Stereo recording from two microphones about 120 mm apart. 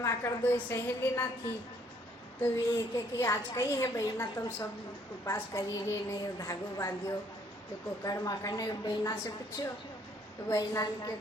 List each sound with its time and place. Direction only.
0.0 s a woman's voice: 20° left (ahead or behind)
2.4 s a woman's voice: 25° left (ahead or behind)
8.0 s a woman's voice: 30° left (ahead or behind)